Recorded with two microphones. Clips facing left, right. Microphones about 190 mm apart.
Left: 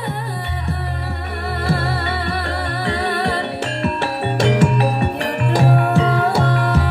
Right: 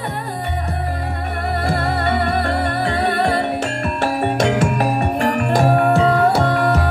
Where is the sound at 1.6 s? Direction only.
50° right (ahead or behind).